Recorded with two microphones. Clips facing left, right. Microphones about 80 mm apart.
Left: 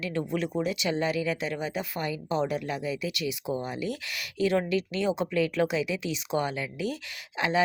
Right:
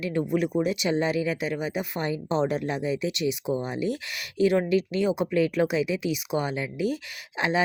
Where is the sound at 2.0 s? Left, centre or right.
Right.